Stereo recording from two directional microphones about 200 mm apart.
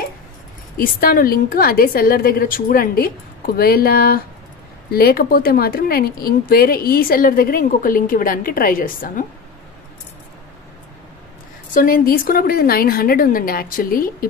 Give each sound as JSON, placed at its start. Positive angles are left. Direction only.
{"t": 0.7, "sound": "speech", "side_deg": 45}
{"t": 11.7, "sound": "speech", "side_deg": 45}